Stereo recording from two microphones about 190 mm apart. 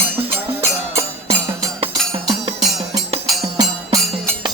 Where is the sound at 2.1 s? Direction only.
30° right (ahead or behind).